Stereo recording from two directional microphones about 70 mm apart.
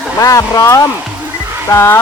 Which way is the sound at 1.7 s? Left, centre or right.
Left.